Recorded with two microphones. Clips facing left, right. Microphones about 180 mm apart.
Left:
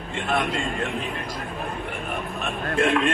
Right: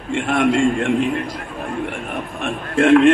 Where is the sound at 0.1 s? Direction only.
70° right (ahead or behind).